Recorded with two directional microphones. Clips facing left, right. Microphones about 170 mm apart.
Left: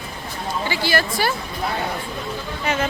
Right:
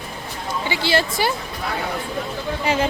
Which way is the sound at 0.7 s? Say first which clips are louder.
Right 2 dB; 25° right (ahead or behind).